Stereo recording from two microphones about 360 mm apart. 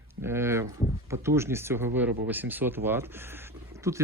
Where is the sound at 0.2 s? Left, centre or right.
Centre.